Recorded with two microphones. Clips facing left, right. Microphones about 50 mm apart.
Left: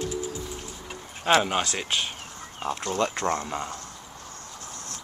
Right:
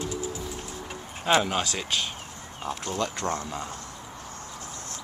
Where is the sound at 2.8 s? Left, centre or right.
Left.